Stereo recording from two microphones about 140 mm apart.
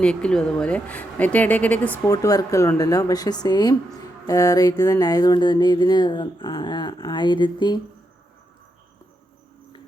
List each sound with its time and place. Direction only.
0.0 s speech: 5° left (ahead or behind)
2.0 s speech: 25° left (ahead or behind)
4.3 s a sound: 25° left (ahead or behind)